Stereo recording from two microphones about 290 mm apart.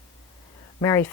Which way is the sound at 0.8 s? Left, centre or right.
Centre.